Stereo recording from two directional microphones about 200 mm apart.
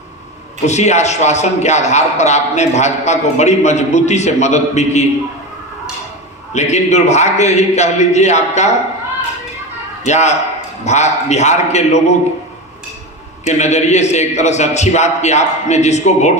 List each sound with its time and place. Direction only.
0.6 s a man's voice: 35° left (ahead or behind)
6.5 s a man's voice: 35° left (ahead or behind)
10.1 s a man's voice: 35° left (ahead or behind)
13.4 s a man's voice: 35° left (ahead or behind)